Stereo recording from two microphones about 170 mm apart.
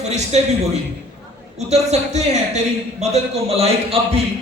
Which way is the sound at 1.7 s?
40° right (ahead or behind).